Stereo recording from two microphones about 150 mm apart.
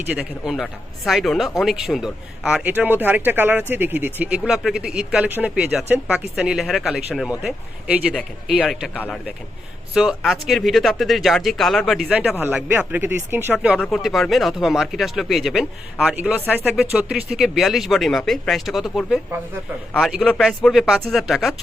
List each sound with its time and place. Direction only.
0.1 s speech: 5° right (ahead or behind)
9.0 s speech: 10° left (ahead or behind)
9.9 s speech: 5° right (ahead or behind)
12.4 s speech: 15° right (ahead or behind)